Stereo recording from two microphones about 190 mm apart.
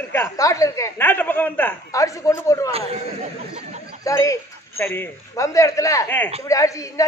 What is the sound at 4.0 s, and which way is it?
A woman's voice, 15° left (ahead or behind).